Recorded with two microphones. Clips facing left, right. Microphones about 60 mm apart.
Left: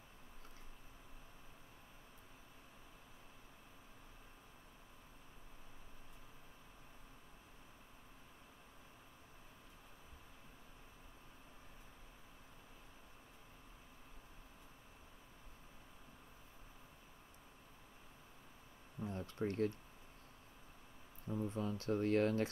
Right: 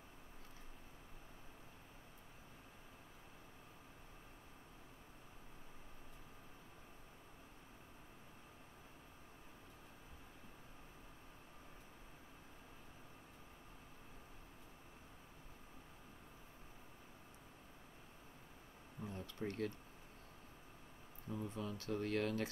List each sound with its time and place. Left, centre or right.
19.0 s speech: left
21.3 s speech: left